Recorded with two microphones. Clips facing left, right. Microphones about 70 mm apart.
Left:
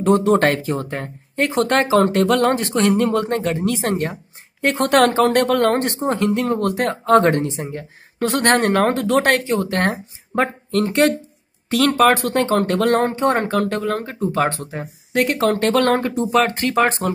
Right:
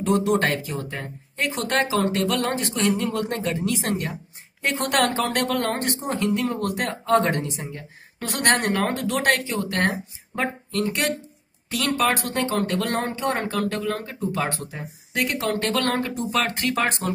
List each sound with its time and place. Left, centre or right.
0.0 s speech: left
3.1 s speech: left
5.4 s speech: left
9.7 s speech: left
12.3 s speech: left